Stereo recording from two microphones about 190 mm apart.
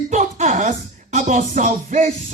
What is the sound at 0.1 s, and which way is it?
Music, 40° right (ahead or behind).